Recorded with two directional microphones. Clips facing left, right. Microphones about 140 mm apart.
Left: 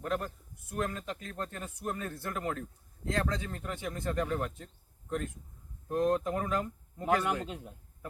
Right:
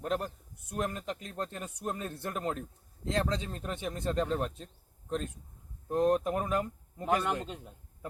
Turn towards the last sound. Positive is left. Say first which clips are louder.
# left 1 dB
turn(degrees=5)  # may be behind; listen again after turning